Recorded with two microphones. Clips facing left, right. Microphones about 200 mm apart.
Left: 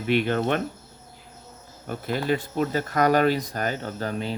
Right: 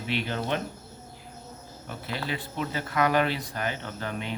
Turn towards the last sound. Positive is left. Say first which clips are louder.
# left 5 dB
turn(degrees=35)  # may be behind; listen again after turning